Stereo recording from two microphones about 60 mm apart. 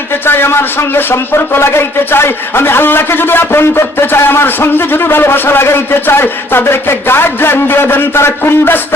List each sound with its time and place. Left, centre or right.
0.3 s speech: left